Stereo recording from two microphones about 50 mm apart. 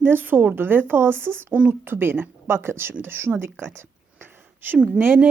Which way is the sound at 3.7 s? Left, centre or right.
Right.